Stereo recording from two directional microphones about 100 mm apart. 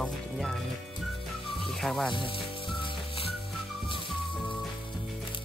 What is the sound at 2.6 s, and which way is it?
Music, 60° left (ahead or behind).